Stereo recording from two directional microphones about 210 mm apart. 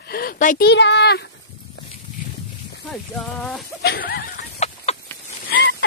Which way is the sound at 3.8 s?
50° left (ahead or behind).